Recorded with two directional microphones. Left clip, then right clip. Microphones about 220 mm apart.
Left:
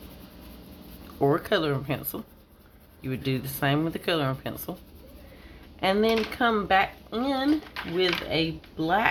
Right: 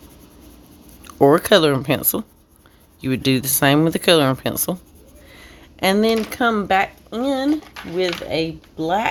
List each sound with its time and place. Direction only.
1.0 s speech: 50° right (ahead or behind); by 9.0 s 35° right (ahead or behind)